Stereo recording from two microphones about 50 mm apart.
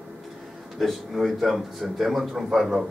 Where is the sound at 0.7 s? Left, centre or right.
Centre.